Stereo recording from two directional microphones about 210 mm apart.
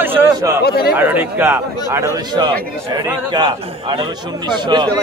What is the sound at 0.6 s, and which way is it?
Speech, 50° left (ahead or behind).